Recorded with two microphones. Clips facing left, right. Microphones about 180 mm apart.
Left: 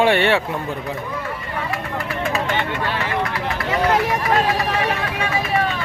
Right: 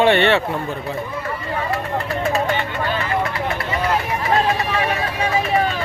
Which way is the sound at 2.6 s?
75° left (ahead or behind).